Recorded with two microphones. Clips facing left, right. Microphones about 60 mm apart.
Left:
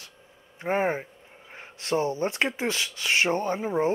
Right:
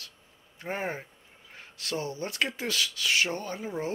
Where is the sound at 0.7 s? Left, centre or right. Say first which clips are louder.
Left 8 dB; left.